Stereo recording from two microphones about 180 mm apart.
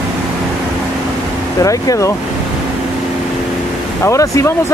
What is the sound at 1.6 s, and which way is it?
Speech, 20° left (ahead or behind).